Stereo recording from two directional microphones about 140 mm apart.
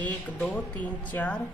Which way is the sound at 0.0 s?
10° left (ahead or behind).